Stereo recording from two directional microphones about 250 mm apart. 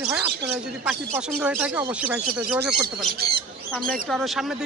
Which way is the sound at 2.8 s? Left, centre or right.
Right.